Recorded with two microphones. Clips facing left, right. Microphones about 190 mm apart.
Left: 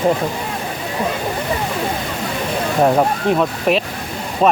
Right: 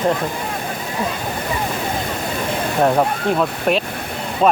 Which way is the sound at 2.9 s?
Centre (ahead or behind).